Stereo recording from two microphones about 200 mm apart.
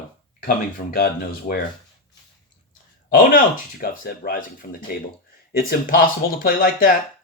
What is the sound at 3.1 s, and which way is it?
Speech, 45° left (ahead or behind).